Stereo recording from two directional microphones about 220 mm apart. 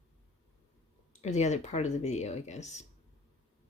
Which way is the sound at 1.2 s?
30° left (ahead or behind).